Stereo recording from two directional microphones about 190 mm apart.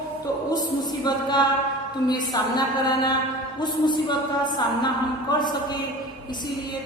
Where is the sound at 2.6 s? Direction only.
20° left (ahead or behind).